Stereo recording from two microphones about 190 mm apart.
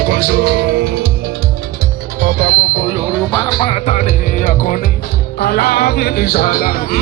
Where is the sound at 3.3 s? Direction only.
20° left (ahead or behind); by 4.8 s 40° left (ahead or behind).